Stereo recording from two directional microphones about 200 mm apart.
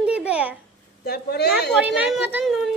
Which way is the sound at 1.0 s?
55° left (ahead or behind).